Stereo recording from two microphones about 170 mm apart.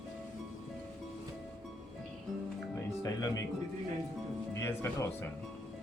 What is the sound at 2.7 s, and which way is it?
Music, 20° left (ahead or behind).